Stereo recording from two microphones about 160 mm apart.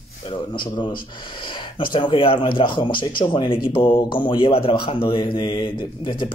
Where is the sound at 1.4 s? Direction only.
30° left (ahead or behind).